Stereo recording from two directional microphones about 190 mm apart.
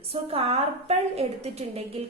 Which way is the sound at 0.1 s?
30° right (ahead or behind).